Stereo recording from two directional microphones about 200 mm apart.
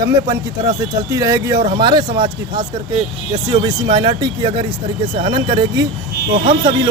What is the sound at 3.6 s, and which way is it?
Speech, 20° right (ahead or behind).